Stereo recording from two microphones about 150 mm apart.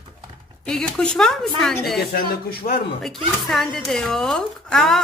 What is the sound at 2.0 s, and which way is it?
Speech, 90° left.